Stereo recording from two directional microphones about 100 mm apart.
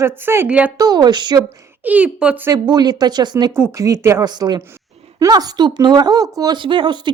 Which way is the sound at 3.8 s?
30° right (ahead or behind).